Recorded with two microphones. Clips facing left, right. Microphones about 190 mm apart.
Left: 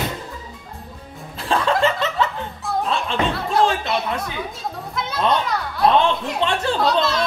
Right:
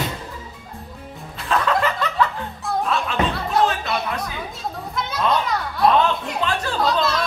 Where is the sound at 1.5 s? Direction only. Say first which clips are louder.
Left 2 dB; 30° left (ahead or behind).